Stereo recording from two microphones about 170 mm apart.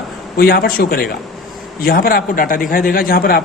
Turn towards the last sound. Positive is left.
turn(degrees=60)  # may be behind; listen again after turning